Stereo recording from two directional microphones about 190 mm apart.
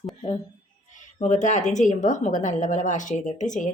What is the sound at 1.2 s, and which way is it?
A woman's voice, 40° left (ahead or behind).